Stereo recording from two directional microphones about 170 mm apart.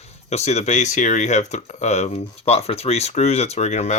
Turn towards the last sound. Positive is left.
turn(degrees=40)  # may be behind; listen again after turning